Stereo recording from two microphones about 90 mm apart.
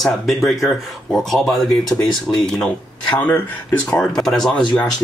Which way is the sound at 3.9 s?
5° left (ahead or behind).